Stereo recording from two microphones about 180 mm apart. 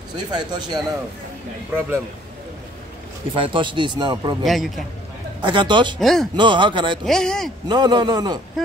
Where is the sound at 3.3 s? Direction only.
30° right (ahead or behind).